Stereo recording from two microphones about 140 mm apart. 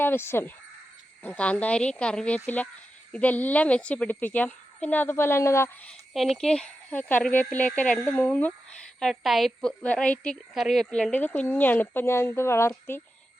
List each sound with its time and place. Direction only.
0.0 s speech: 15° left (ahead or behind)
6.1 s speech: 5° left (ahead or behind); by 13.0 s 20° left (ahead or behind)